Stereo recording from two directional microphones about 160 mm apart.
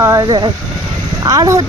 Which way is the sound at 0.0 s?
20° right (ahead or behind).